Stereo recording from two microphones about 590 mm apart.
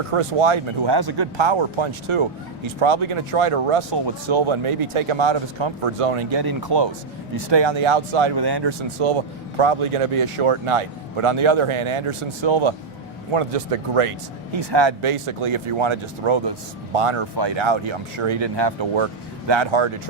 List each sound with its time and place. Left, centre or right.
0.1 s speech: right
6.4 s speech: right
9.0 s speech: right
13.3 s speech: right
14.7 s speech: right
17.3 s speech: right